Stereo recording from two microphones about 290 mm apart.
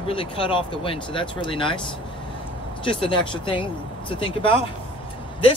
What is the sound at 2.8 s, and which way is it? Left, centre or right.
Speech, centre.